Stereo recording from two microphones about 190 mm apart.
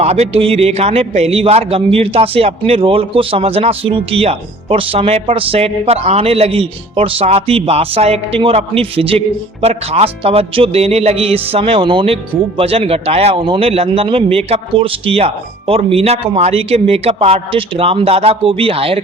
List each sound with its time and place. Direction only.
0.0 s a man's voice: 35° right (ahead or behind)